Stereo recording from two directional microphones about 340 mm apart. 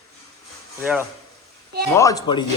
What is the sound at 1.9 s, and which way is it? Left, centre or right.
Speech, centre.